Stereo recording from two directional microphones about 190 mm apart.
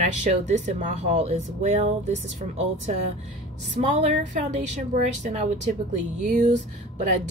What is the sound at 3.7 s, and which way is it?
A woman's voice, 35° right (ahead or behind).